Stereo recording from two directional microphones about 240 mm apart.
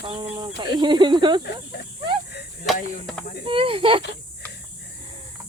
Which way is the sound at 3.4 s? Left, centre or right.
Right.